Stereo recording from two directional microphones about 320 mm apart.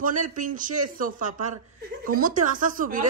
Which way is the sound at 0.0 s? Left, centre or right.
Right.